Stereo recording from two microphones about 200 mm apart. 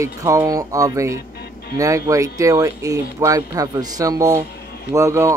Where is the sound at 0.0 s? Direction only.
15° right (ahead or behind).